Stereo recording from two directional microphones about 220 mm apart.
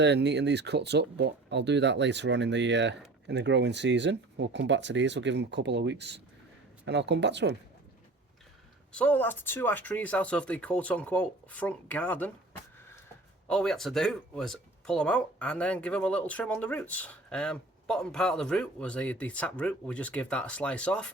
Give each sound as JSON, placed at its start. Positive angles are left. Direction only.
{"t": 0.0, "sound": "speech", "side_deg": -50}
{"t": 8.9, "sound": "speech", "side_deg": 5}
{"t": 13.5, "sound": "speech", "side_deg": 5}